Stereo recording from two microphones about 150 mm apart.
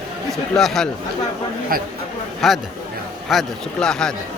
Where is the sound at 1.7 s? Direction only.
75° right (ahead or behind).